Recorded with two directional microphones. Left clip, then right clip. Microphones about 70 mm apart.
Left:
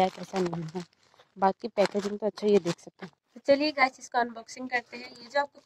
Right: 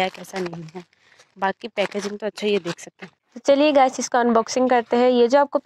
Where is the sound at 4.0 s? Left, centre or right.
Right.